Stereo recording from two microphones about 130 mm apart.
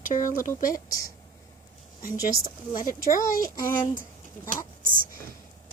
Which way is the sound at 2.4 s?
90° left.